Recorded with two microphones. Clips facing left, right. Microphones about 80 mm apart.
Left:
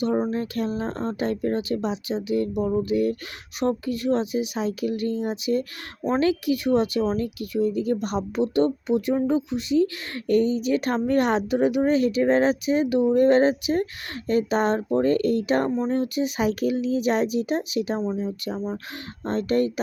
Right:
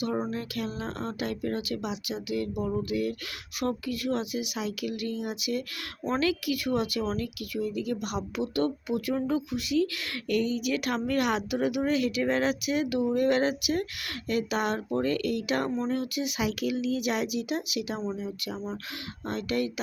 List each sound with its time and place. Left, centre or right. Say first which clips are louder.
0.3 s speech: left 7 dB; left
6.0 s speech: left 6 dB; left
6.2 s speech: left 7 dB; left
18.5 s speech: left 5 dB; centre
19.2 s speech: left 7 dB; left